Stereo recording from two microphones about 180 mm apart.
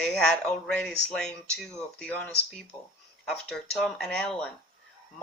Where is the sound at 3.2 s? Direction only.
5° left (ahead or behind).